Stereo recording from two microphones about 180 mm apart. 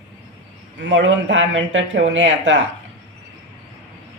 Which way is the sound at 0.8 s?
85° right.